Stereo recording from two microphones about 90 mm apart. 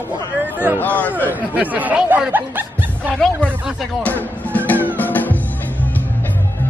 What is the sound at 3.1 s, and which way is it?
Speech, 10° left (ahead or behind).